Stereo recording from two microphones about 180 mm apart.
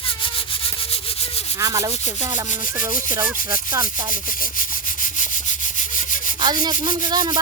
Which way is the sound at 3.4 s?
20° right (ahead or behind).